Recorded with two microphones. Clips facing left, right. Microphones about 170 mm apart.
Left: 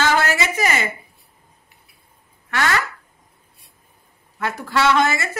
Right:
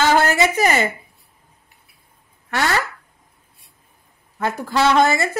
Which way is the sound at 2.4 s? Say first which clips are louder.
Right 1 dB; 35° right (ahead or behind).